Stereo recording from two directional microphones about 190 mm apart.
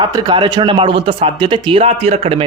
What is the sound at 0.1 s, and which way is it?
Speech, 25° right (ahead or behind).